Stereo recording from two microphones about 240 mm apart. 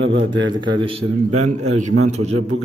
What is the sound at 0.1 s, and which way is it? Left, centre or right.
Speech, right.